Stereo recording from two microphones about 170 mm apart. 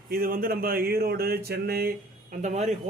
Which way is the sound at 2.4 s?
45° right (ahead or behind).